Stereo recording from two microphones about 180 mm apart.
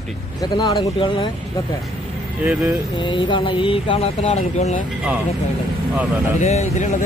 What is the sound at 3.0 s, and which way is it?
Speech, 25° left (ahead or behind).